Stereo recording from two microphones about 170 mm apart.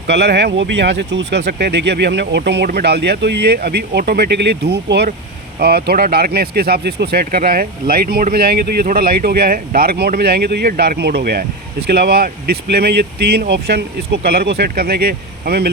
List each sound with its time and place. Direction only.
0.1 s speech: 85° right
5.5 s speech: 65° right (ahead or behind)